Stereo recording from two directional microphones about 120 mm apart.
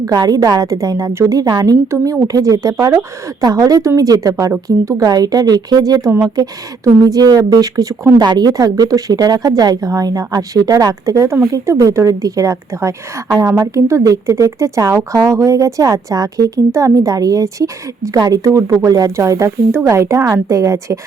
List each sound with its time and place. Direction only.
0.0 s a woman's voice: 30° right (ahead or behind)